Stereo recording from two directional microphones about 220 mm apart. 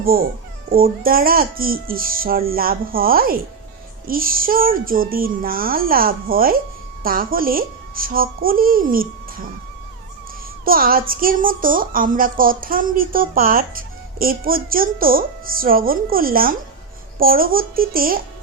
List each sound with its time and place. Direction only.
0.0 s a woman's voice: 40° right (ahead or behind)
10.7 s a woman's voice: 40° right (ahead or behind)